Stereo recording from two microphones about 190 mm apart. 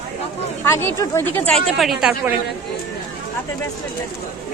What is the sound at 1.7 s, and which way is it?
Speech, centre (ahead or behind).